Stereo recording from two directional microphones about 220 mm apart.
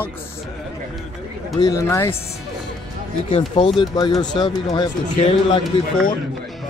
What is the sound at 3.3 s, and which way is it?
Speech, 20° left (ahead or behind).